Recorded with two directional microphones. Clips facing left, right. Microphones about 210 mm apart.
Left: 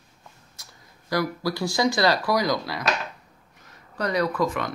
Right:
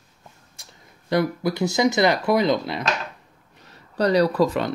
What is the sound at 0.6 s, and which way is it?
Speech, 25° right (ahead or behind).